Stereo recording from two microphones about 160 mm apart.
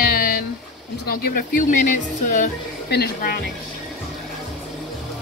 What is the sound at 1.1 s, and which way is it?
Speech, 60° left (ahead or behind).